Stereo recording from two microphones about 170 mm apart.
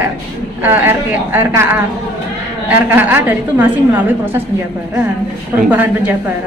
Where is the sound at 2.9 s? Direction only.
10° right (ahead or behind).